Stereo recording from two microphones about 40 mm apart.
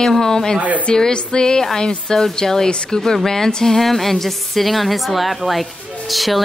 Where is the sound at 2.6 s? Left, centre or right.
Left.